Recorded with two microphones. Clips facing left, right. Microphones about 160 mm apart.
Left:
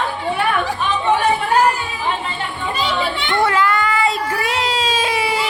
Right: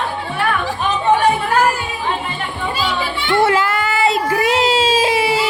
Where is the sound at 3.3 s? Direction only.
25° right (ahead or behind).